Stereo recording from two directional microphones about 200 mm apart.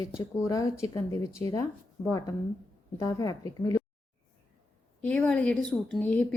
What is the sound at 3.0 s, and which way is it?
Speech, 15° left (ahead or behind).